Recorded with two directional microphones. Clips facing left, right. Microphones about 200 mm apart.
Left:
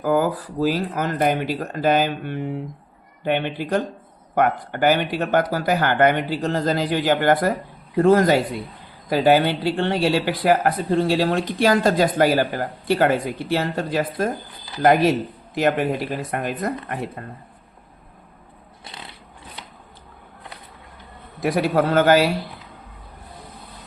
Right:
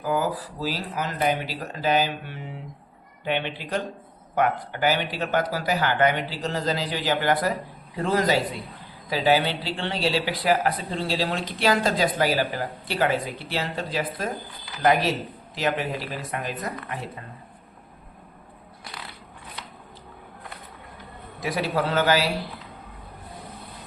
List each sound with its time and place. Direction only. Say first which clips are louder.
0.0 s speech: left 5 dB; 50° left (ahead or behind)
21.4 s speech: left 6 dB; 55° left (ahead or behind)